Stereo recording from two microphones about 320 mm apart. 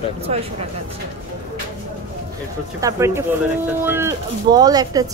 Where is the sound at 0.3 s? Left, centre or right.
Centre.